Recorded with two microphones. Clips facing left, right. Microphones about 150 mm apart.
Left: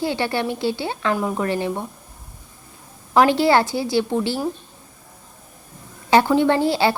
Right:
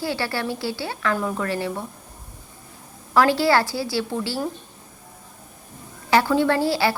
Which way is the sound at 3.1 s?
20° left (ahead or behind).